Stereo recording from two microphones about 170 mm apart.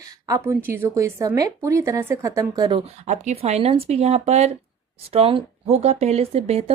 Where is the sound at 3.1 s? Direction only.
40° right (ahead or behind).